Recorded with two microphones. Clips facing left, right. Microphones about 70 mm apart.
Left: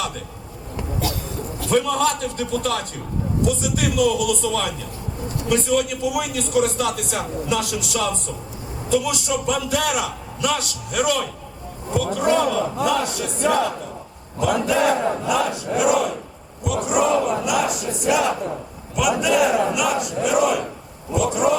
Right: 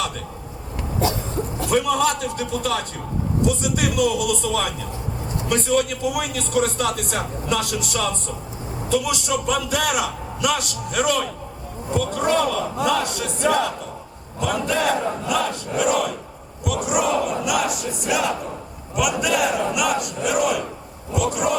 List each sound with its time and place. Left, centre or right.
0.9 s a sound: right
1.7 s a man's voice: centre
14.3 s battle cry: centre
16.6 s a man's voice: centre